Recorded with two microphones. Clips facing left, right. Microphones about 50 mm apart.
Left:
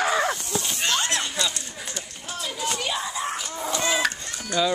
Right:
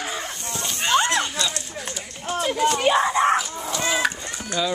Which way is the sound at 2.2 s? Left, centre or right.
Right.